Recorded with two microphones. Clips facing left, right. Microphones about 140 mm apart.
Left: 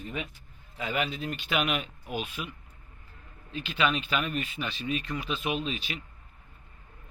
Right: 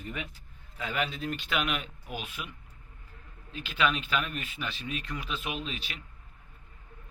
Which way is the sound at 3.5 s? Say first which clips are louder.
Left 1 dB; 5° right (ahead or behind).